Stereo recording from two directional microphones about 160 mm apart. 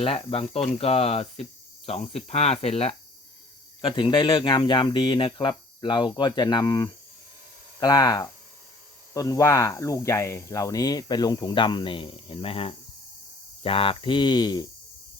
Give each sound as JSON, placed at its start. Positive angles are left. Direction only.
{"t": 0.0, "sound": "cricket", "side_deg": 35}
{"t": 3.8, "sound": "speech", "side_deg": 30}
{"t": 13.6, "sound": "cricket", "side_deg": 35}